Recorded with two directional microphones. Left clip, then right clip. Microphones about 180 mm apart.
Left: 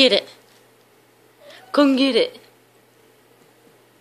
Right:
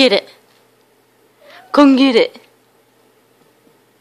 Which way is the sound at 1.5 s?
35° right (ahead or behind).